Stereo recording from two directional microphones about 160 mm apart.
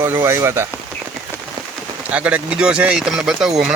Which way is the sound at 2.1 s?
10° right (ahead or behind).